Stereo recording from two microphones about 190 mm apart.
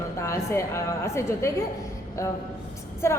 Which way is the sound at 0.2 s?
15° left (ahead or behind).